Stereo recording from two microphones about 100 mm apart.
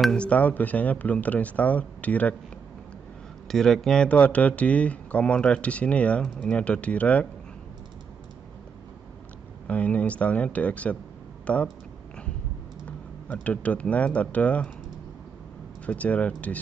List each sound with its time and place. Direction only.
0.0 s speech: 10° left (ahead or behind)
3.4 s speech: 5° left (ahead or behind)
9.7 s speech: 15° left (ahead or behind)
12.8 s speech: 15° left (ahead or behind)
15.8 s speech: 15° left (ahead or behind)